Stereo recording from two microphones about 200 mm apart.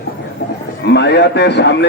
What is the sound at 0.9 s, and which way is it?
Speech, 60° left (ahead or behind).